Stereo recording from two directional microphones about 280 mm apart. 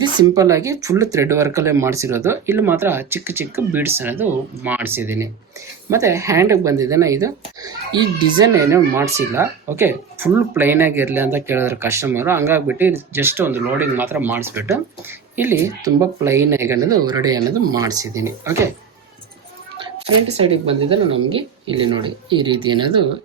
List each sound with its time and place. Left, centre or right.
0.0 s speech: centre
20.3 s speech: centre